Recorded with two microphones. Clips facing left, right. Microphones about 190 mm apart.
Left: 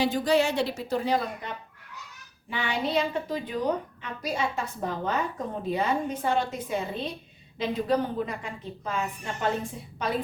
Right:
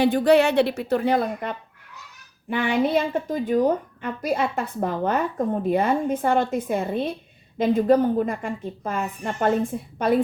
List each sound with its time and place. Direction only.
0.0 s a woman's voice: 60° right (ahead or behind)